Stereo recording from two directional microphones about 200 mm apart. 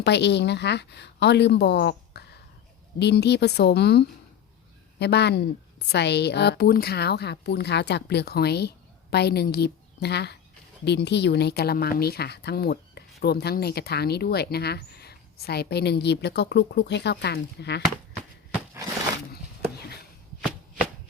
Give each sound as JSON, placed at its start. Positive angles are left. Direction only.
{"t": 0.0, "sound": "speech", "side_deg": 60}